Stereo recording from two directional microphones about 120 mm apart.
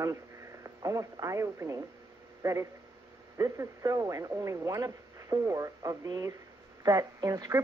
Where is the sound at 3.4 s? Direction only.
30° right (ahead or behind).